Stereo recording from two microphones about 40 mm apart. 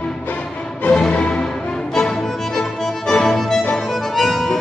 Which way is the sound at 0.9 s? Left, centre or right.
Left.